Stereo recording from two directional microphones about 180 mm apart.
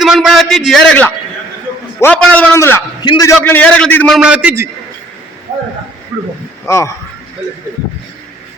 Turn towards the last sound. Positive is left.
turn(degrees=15)  # may be behind; listen again after turning